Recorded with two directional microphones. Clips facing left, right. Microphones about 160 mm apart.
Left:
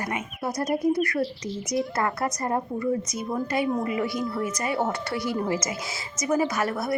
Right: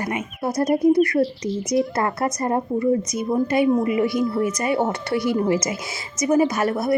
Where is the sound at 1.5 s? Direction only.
Centre (ahead or behind).